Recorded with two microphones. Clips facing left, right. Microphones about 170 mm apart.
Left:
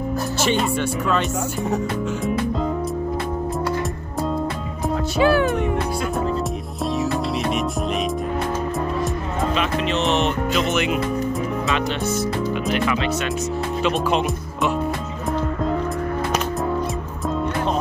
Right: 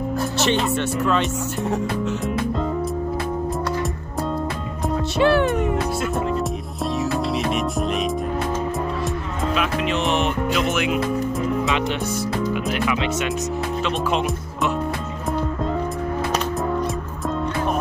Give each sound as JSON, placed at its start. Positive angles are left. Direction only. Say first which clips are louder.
{"t": 0.4, "sound": "speech", "louder": "even", "side_deg": 5}
{"t": 5.1, "sound": "speech", "louder": "even", "side_deg": 0}
{"t": 7.0, "sound": "music", "louder": "right 1 dB", "side_deg": 0}
{"t": 9.6, "sound": "music", "louder": "right 1 dB", "side_deg": -10}
{"t": 10.1, "sound": "speech", "louder": "left 1 dB", "side_deg": -10}
{"t": 13.8, "sound": "speech", "louder": "left 3 dB", "side_deg": 0}